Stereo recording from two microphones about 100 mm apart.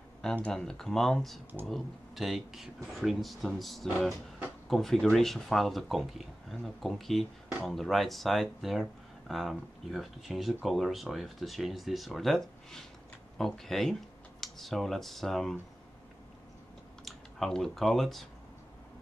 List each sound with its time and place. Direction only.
0.5 s speech: 5° left (ahead or behind)
17.0 s speech: 5° left (ahead or behind)